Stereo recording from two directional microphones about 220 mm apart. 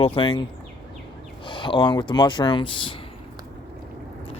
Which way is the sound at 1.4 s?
20° left (ahead or behind).